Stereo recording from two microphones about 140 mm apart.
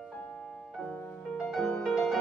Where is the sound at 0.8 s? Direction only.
5° left (ahead or behind).